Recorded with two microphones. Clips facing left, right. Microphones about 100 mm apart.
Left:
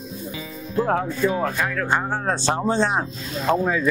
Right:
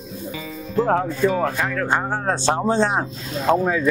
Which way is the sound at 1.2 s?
50° right (ahead or behind).